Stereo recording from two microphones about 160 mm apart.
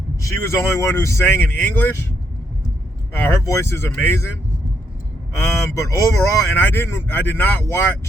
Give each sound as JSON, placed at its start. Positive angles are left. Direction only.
{"t": 0.2, "sound": "speech", "side_deg": 20}
{"t": 3.1, "sound": "speech", "side_deg": 15}
{"t": 5.4, "sound": "speech", "side_deg": 15}